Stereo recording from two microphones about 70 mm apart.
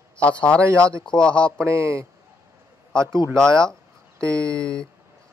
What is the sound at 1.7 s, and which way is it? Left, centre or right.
Speech, right.